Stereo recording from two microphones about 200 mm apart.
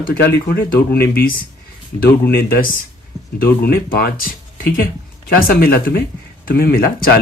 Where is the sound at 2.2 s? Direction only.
50° left (ahead or behind).